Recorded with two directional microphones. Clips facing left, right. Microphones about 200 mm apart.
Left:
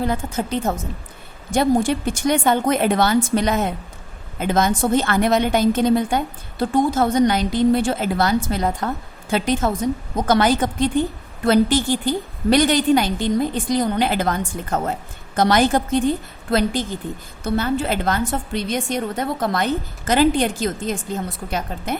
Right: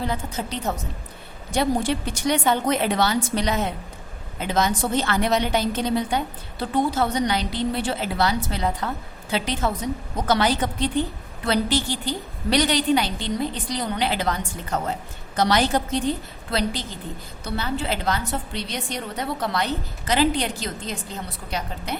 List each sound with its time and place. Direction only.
0.0 s a woman's voice: 50° left (ahead or behind)